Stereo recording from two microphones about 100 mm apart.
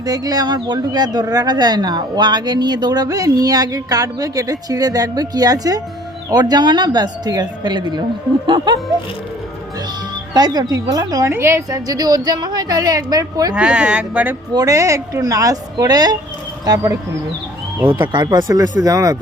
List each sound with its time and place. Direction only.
0.0 s speech: 40° right (ahead or behind)
10.3 s speech: 40° right (ahead or behind)
11.3 s speech: 25° right (ahead or behind)
13.6 s speech: 10° right (ahead or behind)
14.5 s speech: 35° right (ahead or behind)
18.1 s speech: 45° right (ahead or behind)